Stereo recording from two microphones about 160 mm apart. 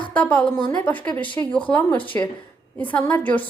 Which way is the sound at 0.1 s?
10° left (ahead or behind).